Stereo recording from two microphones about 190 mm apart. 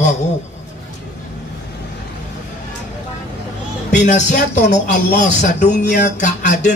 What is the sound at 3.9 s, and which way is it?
Speech, 40° left (ahead or behind).